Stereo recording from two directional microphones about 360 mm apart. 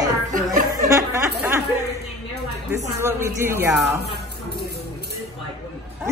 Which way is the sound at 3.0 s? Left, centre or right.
Centre.